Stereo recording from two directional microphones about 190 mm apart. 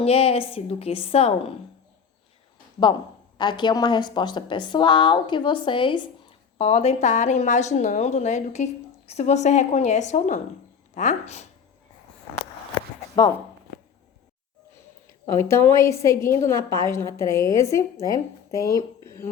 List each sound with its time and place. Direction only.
0.0 s a woman's voice: 30° left (ahead or behind)
3.3 s a woman's voice: 25° left (ahead or behind)
15.0 s a woman's voice: 15° left (ahead or behind)
19.0 s a sound: 15° left (ahead or behind)